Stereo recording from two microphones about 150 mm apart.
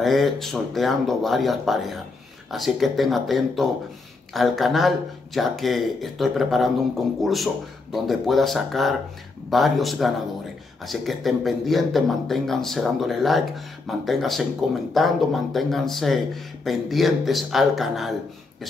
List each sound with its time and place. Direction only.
0.0 s speech: centre (ahead or behind)